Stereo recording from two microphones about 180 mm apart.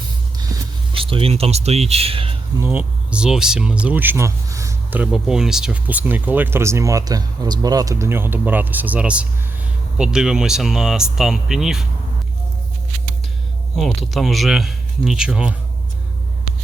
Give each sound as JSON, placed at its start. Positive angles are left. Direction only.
{"t": 0.5, "sound": "music", "side_deg": -20}
{"t": 0.9, "sound": "speech", "side_deg": -30}
{"t": 2.6, "sound": "speech", "side_deg": -10}
{"t": 13.7, "sound": "speech", "side_deg": 0}